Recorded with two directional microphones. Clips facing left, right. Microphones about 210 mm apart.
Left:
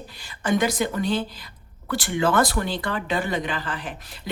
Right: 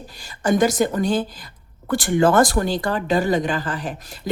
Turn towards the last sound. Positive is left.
turn(degrees=-45)  # may be behind; listen again after turning